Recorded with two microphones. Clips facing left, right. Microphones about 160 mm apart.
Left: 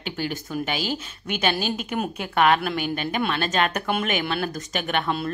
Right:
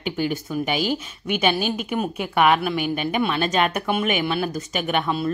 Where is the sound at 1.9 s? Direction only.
5° right (ahead or behind).